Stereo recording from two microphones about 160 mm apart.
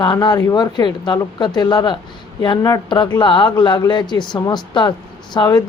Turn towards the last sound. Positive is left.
turn(degrees=25)  # may be behind; listen again after turning